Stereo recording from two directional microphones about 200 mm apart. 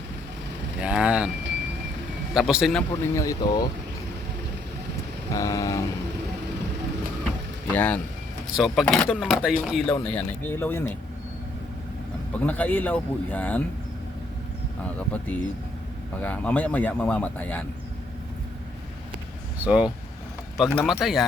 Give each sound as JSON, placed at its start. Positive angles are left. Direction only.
{"t": 0.8, "sound": "speech", "side_deg": -5}
{"t": 2.3, "sound": "speech", "side_deg": 0}
{"t": 3.0, "sound": "speech", "side_deg": 15}
{"t": 5.3, "sound": "vehicle", "side_deg": 15}
{"t": 7.7, "sound": "speech", "side_deg": 5}
{"t": 12.4, "sound": "speech", "side_deg": 5}
{"t": 14.9, "sound": "speech", "side_deg": 5}
{"t": 19.6, "sound": "speech", "side_deg": -5}